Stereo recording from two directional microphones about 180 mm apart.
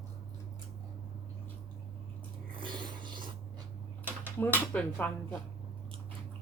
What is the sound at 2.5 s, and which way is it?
Zipper, 25° right (ahead or behind).